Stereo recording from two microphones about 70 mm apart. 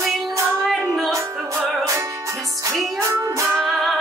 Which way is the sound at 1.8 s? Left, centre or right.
Right.